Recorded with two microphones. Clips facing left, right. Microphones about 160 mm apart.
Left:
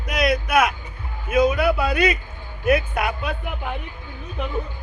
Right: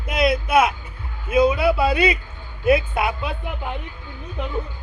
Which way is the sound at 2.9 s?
25° right (ahead or behind).